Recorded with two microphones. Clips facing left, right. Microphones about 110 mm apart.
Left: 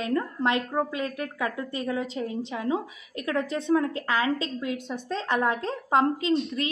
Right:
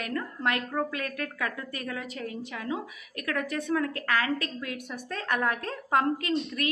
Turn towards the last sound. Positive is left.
turn(degrees=20)  # may be behind; listen again after turning